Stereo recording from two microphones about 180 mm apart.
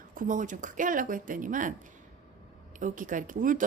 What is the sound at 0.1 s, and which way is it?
Speech, 45° right (ahead or behind).